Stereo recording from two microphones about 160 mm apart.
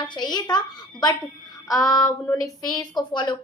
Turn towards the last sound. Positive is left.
turn(degrees=25)  # may be behind; listen again after turning